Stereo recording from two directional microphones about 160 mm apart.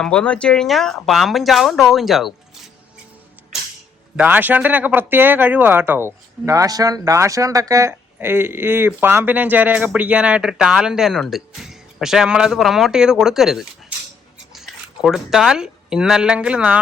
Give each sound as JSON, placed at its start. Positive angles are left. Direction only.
{"t": 0.0, "sound": "speech", "side_deg": 5}
{"t": 4.2, "sound": "speech", "side_deg": -10}